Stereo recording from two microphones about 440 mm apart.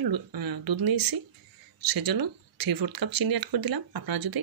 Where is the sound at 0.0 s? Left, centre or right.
Right.